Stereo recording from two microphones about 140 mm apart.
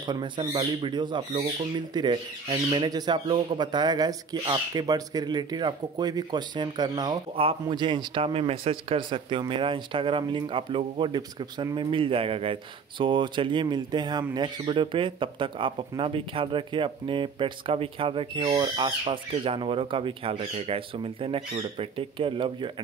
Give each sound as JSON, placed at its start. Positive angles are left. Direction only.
{"t": 0.0, "sound": "speech", "side_deg": -35}